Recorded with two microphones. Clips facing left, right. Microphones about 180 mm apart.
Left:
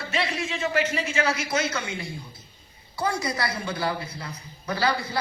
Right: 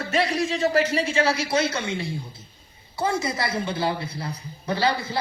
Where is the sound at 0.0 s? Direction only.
40° right (ahead or behind).